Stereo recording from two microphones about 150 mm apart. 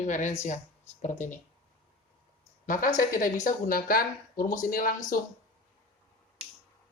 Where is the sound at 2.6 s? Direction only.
60° left (ahead or behind).